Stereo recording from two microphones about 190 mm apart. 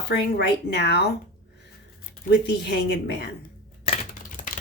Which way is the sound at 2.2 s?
60° left (ahead or behind).